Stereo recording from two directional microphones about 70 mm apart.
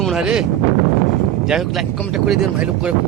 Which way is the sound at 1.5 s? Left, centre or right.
Centre.